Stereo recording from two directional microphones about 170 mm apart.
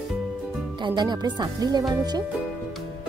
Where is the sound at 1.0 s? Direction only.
25° right (ahead or behind).